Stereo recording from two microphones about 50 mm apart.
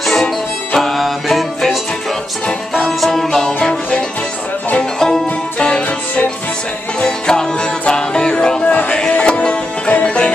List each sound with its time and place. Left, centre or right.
0.0 s music: centre
4.9 s music: centre